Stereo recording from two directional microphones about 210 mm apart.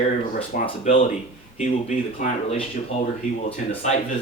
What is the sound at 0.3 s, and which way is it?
Speech, 30° left (ahead or behind).